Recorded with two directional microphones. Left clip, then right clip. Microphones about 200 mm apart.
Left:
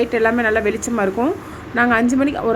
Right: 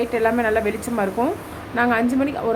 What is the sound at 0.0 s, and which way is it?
A woman's voice, 10° left (ahead or behind).